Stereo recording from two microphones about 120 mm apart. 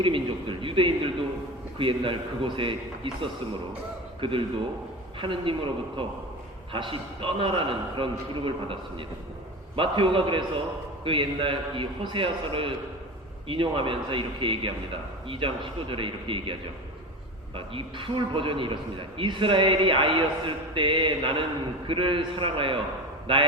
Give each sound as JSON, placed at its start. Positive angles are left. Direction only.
{"t": 0.0, "sound": "a man's voice", "side_deg": -45}
{"t": 17.7, "sound": "a man's voice", "side_deg": -45}